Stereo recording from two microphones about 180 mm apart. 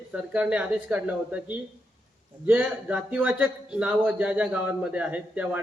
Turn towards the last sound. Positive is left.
turn(degrees=-10)  # may be behind; listen again after turning